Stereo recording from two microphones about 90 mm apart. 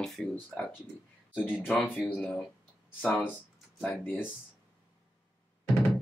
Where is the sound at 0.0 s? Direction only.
5° left (ahead or behind).